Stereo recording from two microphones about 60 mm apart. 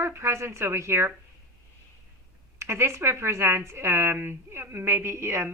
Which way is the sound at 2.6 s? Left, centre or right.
Right.